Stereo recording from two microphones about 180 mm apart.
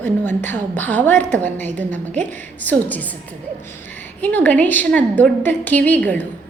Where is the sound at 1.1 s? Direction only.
45° right (ahead or behind).